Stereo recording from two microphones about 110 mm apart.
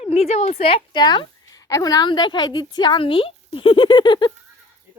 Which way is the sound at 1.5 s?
35° left (ahead or behind).